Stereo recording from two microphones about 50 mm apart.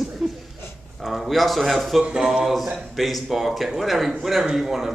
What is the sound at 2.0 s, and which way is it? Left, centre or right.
Speech, centre.